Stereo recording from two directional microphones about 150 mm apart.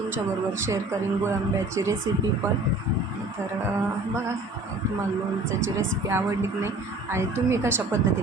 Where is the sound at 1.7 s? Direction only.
20° right (ahead or behind).